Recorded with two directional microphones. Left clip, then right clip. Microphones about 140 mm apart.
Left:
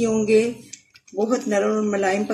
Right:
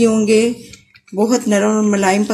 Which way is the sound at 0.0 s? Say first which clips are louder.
Right 5 dB; 70° right (ahead or behind).